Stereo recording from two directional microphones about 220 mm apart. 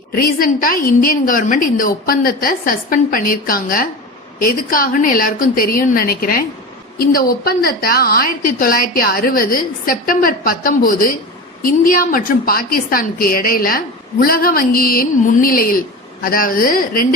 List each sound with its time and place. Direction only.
0.2 s a woman's voice: 40° left (ahead or behind)